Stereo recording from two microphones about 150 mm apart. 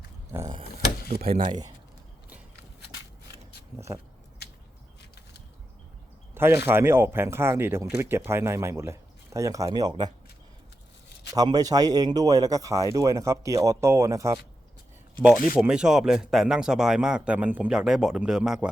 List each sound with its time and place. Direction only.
0.3 s a sound: 25° right (ahead or behind)
1.4 s speech: 30° right (ahead or behind)
6.3 s speech: 15° right (ahead or behind)
11.3 s speech: 25° right (ahead or behind)
15.5 s speech: 5° right (ahead or behind)